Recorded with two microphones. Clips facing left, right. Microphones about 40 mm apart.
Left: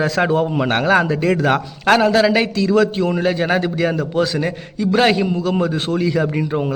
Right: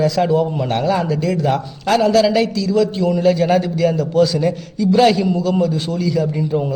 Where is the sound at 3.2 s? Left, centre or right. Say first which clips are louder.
Right 6 dB; left.